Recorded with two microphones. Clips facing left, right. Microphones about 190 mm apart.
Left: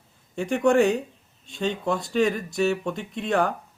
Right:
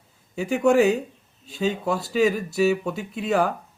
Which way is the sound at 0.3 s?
5° right (ahead or behind).